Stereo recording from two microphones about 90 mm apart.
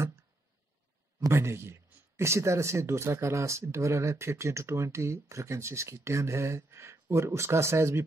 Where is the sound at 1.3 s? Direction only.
30° right (ahead or behind).